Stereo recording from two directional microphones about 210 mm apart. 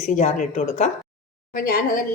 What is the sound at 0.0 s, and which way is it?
A woman's voice, 35° left (ahead or behind).